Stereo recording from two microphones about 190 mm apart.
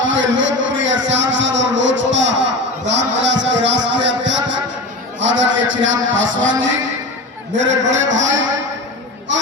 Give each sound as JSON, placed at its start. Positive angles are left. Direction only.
{"t": 0.0, "sound": "a man's voice", "side_deg": -75}